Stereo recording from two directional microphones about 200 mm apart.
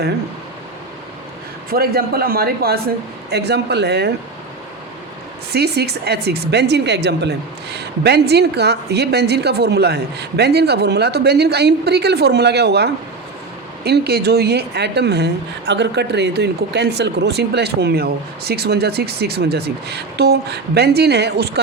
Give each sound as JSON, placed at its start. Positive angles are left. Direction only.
{"t": 1.7, "sound": "a woman's voice", "side_deg": -50}
{"t": 5.5, "sound": "a woman's voice", "side_deg": -55}